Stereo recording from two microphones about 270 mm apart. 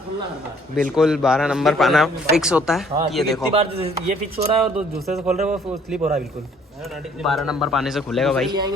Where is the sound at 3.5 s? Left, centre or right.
Right.